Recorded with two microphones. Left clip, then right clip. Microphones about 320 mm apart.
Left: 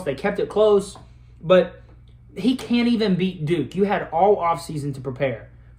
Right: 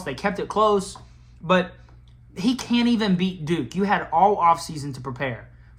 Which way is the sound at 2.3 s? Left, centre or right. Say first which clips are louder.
Left 1 dB; centre.